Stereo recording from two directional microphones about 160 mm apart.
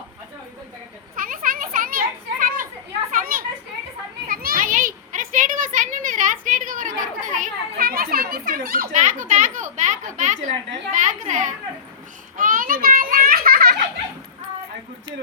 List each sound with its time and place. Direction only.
1.1 s children playing: 60° right (ahead or behind)
10.9 s a sound: 50° right (ahead or behind)
12.4 s children playing: 60° right (ahead or behind)